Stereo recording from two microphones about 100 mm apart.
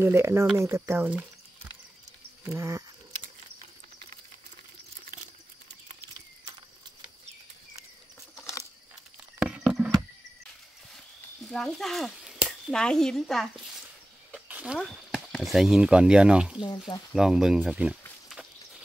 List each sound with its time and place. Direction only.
0.0 s speech: 25° right (ahead or behind)
2.4 s speech: 30° right (ahead or behind)
9.5 s horse: 5° right (ahead or behind)
11.4 s a sound: 5° left (ahead or behind)
12.7 s speech: 5° left (ahead or behind)
14.5 s a sound: 10° right (ahead or behind)
15.4 s speech: 5° right (ahead or behind)
16.6 s speech: 45° left (ahead or behind)
17.1 s speech: 5° right (ahead or behind)